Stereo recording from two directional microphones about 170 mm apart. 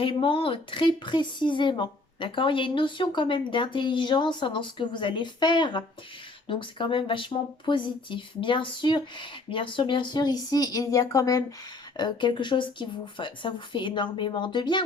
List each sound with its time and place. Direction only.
0.0 s speech: 30° left (ahead or behind)